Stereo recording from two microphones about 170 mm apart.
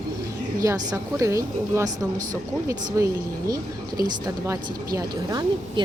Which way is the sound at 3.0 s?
20° right (ahead or behind).